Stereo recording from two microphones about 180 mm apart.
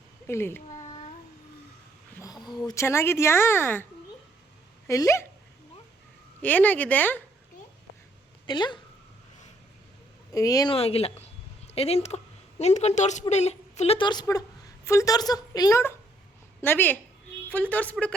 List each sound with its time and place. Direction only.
0.3 s a woman's voice: 15° left (ahead or behind)
2.1 s a sound: 20° left (ahead or behind)
2.6 s a woman's voice: 15° left (ahead or behind)
4.9 s a woman's voice: 15° left (ahead or behind)
6.4 s a woman's voice: 10° left (ahead or behind)
8.4 s a woman's voice: 25° left (ahead or behind)
10.3 s a woman's voice: 20° left (ahead or behind)
10.8 s a woman's voice: 35° left (ahead or behind); by 18.1 s 5° left (ahead or behind)